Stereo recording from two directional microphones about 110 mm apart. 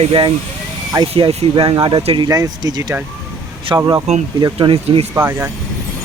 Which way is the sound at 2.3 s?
35° right (ahead or behind).